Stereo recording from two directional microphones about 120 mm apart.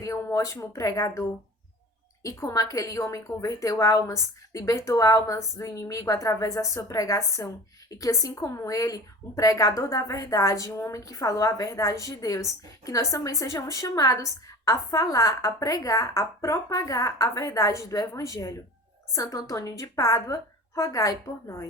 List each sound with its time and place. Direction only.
0.0 s a woman's voice: 25° left (ahead or behind)
2.2 s a woman's voice: 25° left (ahead or behind)